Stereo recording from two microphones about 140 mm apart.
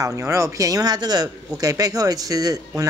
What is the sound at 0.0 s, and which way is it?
Speech, 20° right (ahead or behind).